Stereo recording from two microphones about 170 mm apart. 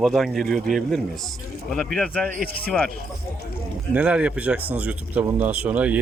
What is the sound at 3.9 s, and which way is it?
Speech, 5° right (ahead or behind).